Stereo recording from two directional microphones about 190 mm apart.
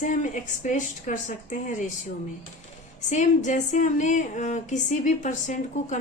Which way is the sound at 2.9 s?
40° left (ahead or behind).